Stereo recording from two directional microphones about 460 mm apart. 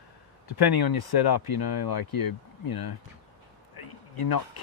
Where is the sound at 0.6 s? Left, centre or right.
Left.